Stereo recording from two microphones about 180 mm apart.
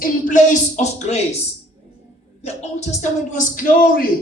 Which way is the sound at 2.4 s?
40° left (ahead or behind).